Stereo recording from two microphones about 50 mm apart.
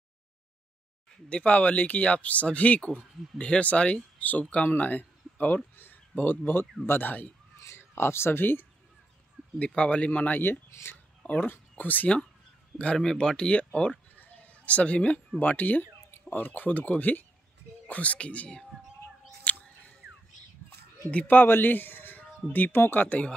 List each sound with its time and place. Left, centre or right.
1.3 s a man's voice: left
7.6 s speech: left
9.6 s speech: left
11.2 s a sound: left
11.7 s speech: left
12.7 s speech: centre
13.7 s a sound: left
15.5 s speech: left
19.5 s a sound: left
21.1 s speech: left
21.5 s a man's voice: left